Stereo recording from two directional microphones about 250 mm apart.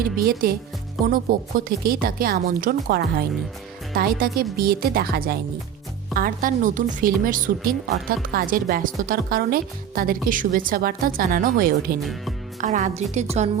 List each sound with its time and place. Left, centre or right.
0.0 s a woman's voice: right